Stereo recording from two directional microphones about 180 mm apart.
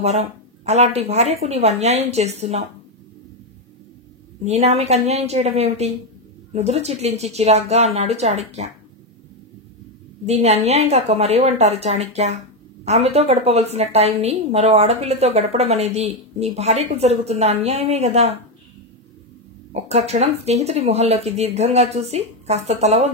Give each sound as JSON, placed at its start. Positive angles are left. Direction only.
{"t": 0.0, "sound": "a woman's voice", "side_deg": -35}
{"t": 4.5, "sound": "a woman's voice", "side_deg": -35}
{"t": 10.2, "sound": "a woman's voice", "side_deg": -35}
{"t": 19.7, "sound": "a woman's voice", "side_deg": -35}